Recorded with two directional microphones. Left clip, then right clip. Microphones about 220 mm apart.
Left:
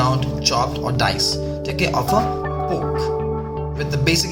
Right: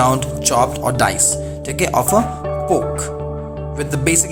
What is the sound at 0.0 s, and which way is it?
Music, 40° right (ahead or behind).